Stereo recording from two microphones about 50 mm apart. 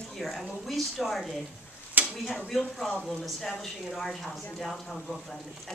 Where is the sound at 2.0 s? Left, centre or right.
Right.